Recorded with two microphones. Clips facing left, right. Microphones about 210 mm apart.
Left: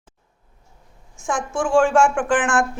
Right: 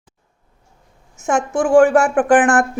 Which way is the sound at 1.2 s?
40° right (ahead or behind).